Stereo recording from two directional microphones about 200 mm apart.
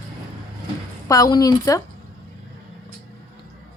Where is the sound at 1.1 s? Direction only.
20° left (ahead or behind).